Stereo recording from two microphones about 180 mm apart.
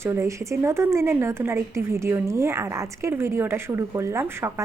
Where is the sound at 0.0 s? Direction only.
15° right (ahead or behind).